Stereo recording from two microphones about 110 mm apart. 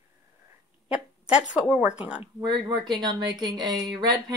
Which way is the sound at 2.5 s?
45° right (ahead or behind).